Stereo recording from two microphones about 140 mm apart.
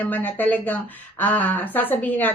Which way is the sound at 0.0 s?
10° left (ahead or behind).